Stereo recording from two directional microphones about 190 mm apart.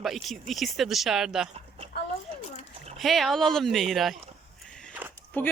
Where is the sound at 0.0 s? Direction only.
Centre (ahead or behind).